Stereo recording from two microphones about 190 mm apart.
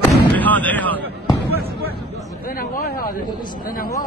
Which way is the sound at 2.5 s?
50° left (ahead or behind).